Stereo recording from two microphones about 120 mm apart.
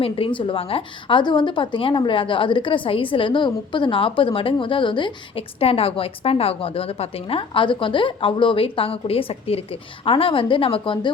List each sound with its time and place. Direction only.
0.0 s a woman's voice: 45° left (ahead or behind)
5.5 s a woman's voice: 55° left (ahead or behind)